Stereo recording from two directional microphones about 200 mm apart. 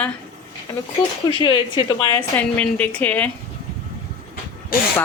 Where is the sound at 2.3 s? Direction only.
5° left (ahead or behind).